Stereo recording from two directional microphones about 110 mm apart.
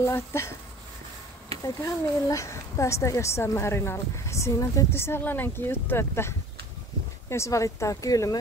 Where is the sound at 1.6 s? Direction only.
30° left (ahead or behind).